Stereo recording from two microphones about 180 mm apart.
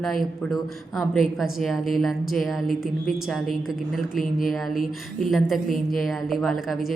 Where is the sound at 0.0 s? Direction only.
Centre (ahead or behind).